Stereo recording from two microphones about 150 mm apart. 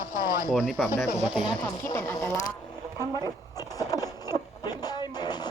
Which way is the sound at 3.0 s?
25° left (ahead or behind).